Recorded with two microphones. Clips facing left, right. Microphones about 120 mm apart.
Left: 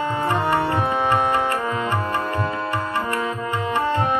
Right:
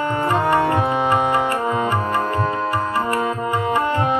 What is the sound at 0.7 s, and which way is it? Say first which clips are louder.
Music: right 2 dB; 15° right (ahead or behind).